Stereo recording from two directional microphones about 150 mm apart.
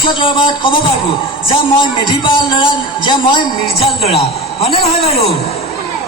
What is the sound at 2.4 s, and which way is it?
Speech, 30° left (ahead or behind).